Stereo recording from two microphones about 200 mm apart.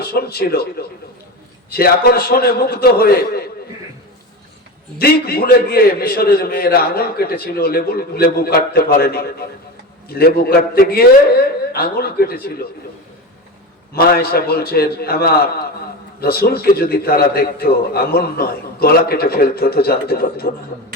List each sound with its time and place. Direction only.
0.0 s a man's voice: 50° left (ahead or behind)
4.9 s a man's voice: 50° left (ahead or behind)
13.9 s a man's voice: 50° left (ahead or behind)